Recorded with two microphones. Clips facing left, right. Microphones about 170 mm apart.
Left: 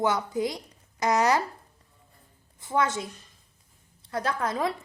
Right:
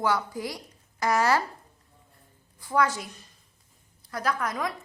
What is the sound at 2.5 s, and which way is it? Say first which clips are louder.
A woman's voice: right 1 dB; 25° left (ahead or behind).